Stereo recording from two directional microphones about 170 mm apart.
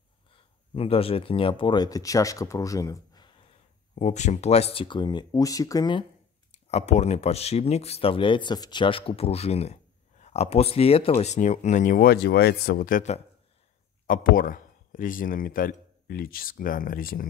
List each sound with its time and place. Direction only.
0.3 s speech: 35° left (ahead or behind)
3.9 s speech: 45° left (ahead or behind); by 6.0 s 25° left (ahead or behind)
6.5 s a man's voice: 40° left (ahead or behind); by 17.3 s 55° left (ahead or behind)